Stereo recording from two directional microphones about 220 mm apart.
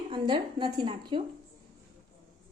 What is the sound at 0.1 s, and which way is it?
A woman's voice, 20° right (ahead or behind).